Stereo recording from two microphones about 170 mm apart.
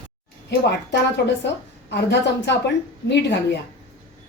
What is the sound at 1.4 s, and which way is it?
A woman's voice, 90° left.